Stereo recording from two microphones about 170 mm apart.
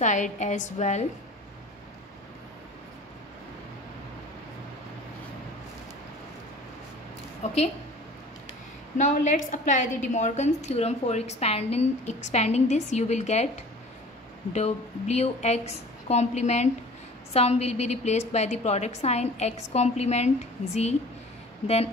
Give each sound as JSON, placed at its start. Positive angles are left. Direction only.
{"t": 0.0, "sound": "a woman's voice", "side_deg": 45}
{"t": 7.4, "sound": "a woman's voice", "side_deg": 40}
{"t": 8.9, "sound": "a woman's voice", "side_deg": 45}
{"t": 14.5, "sound": "a woman's voice", "side_deg": 40}